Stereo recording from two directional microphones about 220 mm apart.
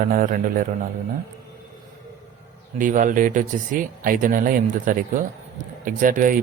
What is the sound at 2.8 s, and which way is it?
Speech, 35° right (ahead or behind).